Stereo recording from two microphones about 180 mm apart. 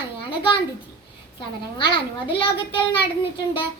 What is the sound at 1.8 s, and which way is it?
Speech, 30° left (ahead or behind).